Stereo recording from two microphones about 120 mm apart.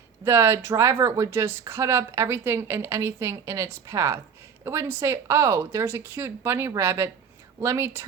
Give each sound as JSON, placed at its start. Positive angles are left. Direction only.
{"t": 0.3, "sound": "speech", "side_deg": -20}